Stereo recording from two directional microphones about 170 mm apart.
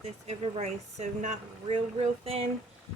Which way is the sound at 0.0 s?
40° right (ahead or behind).